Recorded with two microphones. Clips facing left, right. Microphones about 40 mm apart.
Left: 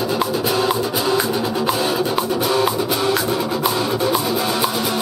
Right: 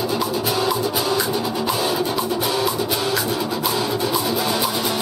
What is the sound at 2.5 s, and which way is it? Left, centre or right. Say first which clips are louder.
Music: left 3 dB; centre.